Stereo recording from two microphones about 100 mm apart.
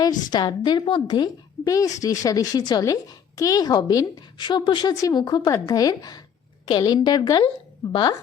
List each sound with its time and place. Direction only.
0.0 s a woman's voice: 45° left (ahead or behind)
4.9 s a woman's voice: 40° left (ahead or behind)
7.8 s a woman's voice: 30° left (ahead or behind)